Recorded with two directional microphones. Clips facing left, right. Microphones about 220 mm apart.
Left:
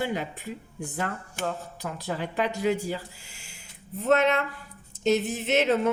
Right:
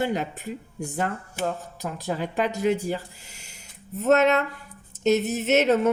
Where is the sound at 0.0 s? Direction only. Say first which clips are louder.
Right 3 dB; 45° right (ahead or behind).